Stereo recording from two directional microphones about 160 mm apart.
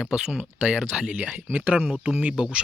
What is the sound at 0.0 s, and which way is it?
Speech, 5° right (ahead or behind).